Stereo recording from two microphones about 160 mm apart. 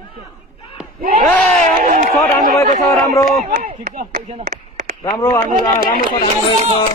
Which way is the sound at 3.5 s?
55° right (ahead or behind).